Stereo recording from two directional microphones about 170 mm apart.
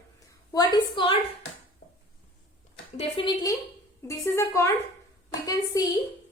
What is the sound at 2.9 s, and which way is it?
Speech, 30° left (ahead or behind).